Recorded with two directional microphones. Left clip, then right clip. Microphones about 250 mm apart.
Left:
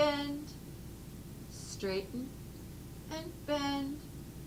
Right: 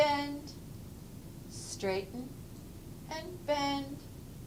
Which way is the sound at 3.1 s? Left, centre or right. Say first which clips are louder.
Right 2 dB; right.